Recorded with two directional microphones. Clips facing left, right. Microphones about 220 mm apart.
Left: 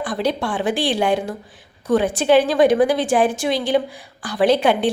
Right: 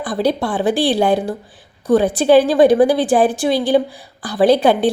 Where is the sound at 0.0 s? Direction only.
35° right (ahead or behind).